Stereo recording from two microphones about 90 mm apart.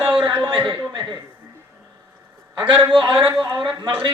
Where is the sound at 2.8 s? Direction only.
65° right (ahead or behind).